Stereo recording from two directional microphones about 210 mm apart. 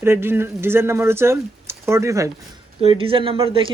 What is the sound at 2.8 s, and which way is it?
Speech, 25° right (ahead or behind).